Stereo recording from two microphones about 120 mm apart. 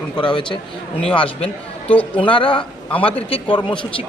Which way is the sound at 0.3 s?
45° left (ahead or behind).